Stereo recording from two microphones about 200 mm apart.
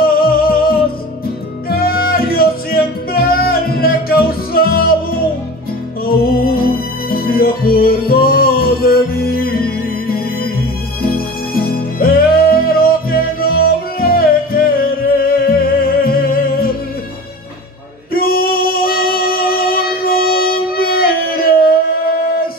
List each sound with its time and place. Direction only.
0.0 s music: 50° left (ahead or behind)
6.0 s music: 50° left (ahead or behind)
18.1 s singing: 50° left (ahead or behind)